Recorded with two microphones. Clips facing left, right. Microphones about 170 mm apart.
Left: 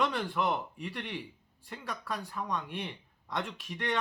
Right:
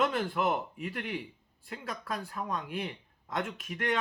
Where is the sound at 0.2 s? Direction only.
5° right (ahead or behind).